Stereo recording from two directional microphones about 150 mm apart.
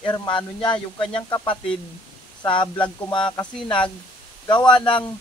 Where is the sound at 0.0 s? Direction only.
30° left (ahead or behind).